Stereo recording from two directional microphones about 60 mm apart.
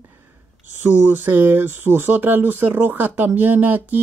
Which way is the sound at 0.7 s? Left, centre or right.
Right.